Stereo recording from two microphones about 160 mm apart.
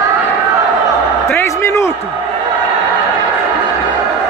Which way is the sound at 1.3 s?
15° left (ahead or behind).